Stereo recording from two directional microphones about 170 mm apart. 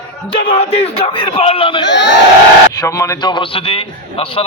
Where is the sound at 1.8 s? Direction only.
90° left.